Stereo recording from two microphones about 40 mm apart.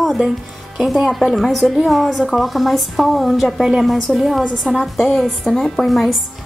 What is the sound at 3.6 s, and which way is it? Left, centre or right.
Speech, centre.